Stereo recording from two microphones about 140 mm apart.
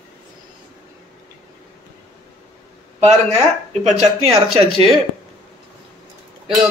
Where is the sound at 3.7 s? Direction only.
50° right (ahead or behind).